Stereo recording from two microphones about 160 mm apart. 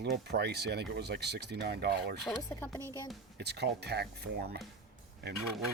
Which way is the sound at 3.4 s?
90° right.